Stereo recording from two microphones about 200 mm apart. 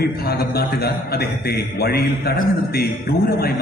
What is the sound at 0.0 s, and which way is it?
A man's voice, 50° left (ahead or behind).